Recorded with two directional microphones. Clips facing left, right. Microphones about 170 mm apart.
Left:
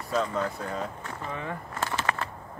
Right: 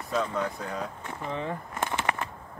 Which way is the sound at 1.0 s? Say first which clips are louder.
Right 2 dB; 25° right (ahead or behind).